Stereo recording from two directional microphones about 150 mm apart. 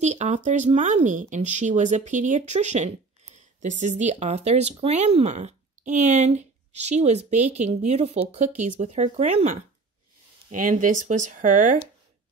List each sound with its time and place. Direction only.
0.0 s speech: 50° right (ahead or behind)
10.5 s speech: 60° right (ahead or behind)